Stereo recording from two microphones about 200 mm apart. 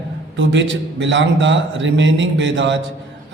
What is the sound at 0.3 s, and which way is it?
A man's voice, 65° right (ahead or behind).